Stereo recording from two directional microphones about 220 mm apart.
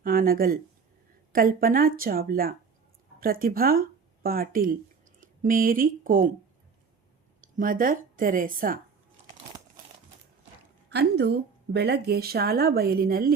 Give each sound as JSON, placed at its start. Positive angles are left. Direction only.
{"t": 0.0, "sound": "speech", "side_deg": -40}
{"t": 7.4, "sound": "speech", "side_deg": -35}
{"t": 11.2, "sound": "speech", "side_deg": -50}